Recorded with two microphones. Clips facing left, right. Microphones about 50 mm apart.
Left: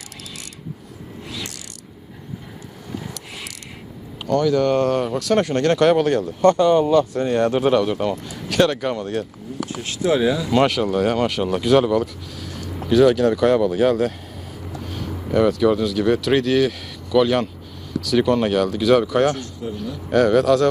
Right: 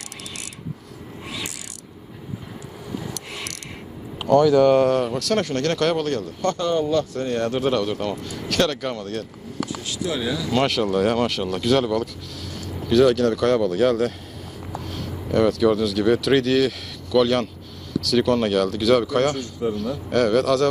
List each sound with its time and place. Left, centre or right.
4.2 s speech: centre
9.8 s speech: left
10.5 s speech: centre
19.6 s speech: right
20.1 s speech: centre